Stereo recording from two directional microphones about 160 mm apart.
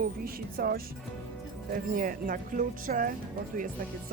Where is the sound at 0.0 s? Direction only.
65° right (ahead or behind).